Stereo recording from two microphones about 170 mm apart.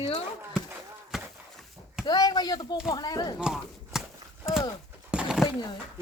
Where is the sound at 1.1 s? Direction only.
Centre (ahead or behind).